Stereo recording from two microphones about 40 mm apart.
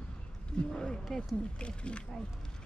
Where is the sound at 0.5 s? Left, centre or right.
Left.